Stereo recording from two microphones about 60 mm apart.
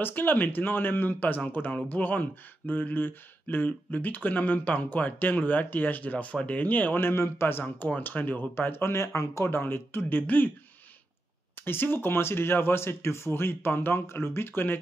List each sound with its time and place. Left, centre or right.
0.0 s speech: left
8.0 s speech: left
11.6 s speech: left